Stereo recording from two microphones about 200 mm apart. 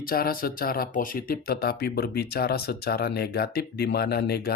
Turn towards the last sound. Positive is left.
turn(degrees=50)  # may be behind; listen again after turning